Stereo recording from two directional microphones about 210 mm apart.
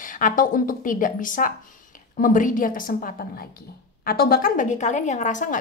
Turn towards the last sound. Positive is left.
turn(degrees=35)  # may be behind; listen again after turning